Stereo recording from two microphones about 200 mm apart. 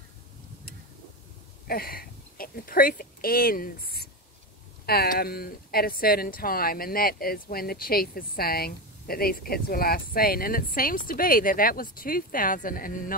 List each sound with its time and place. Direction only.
1.7 s speech: 50° left (ahead or behind)